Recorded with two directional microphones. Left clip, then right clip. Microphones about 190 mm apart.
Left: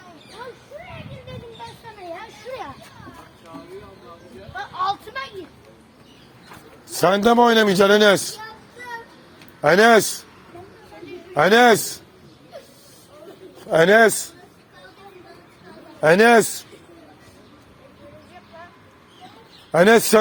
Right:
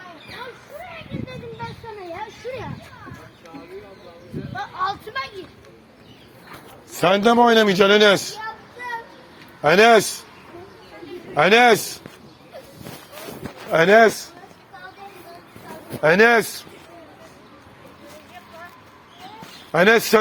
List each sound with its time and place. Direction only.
4.5 s a sound: 25° right (ahead or behind)
6.9 s a man's voice: 50° left (ahead or behind)
9.6 s a man's voice: 40° left (ahead or behind)
11.3 s a man's voice: 40° left (ahead or behind)
13.7 s a man's voice: 35° left (ahead or behind)
16.0 s a man's voice: 45° left (ahead or behind)
19.7 s a man's voice: 45° left (ahead or behind)